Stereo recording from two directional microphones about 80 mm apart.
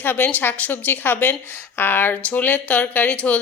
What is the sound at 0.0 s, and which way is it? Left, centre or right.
Speech, left.